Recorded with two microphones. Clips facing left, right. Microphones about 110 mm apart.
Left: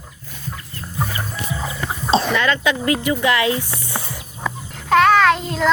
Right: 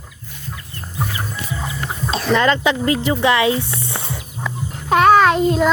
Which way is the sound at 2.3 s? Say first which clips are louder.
Right 3 dB; 30° right (ahead or behind).